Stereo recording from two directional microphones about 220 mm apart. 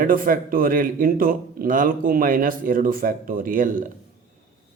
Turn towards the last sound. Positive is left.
turn(degrees=-40)  # may be behind; listen again after turning